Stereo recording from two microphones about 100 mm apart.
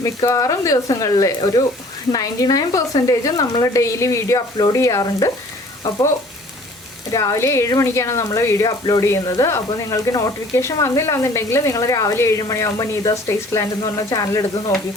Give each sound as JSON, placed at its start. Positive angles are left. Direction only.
{"t": 0.3, "sound": "speech", "side_deg": 35}
{"t": 7.1, "sound": "speech", "side_deg": 30}